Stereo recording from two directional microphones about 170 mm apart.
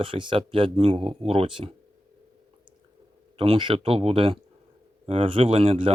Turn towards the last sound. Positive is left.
turn(degrees=-35)  # may be behind; listen again after turning